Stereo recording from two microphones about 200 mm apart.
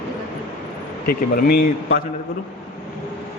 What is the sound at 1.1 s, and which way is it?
Speech, 45° left (ahead or behind).